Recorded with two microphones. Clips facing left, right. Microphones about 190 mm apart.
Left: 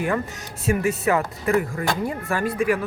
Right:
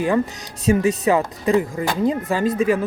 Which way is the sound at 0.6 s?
20° right (ahead or behind).